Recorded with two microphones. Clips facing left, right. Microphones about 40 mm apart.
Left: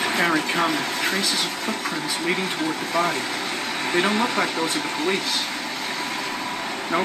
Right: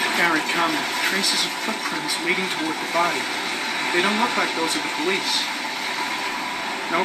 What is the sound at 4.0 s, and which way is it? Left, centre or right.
Speech, centre.